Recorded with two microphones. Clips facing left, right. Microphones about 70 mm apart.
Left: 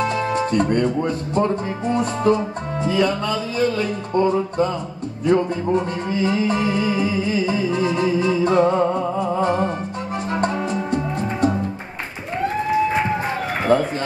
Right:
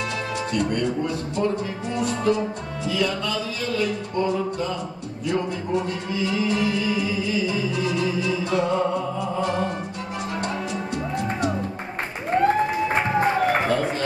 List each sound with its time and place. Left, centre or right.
0.3 s speech: left
2.0 s music: left
13.7 s music: left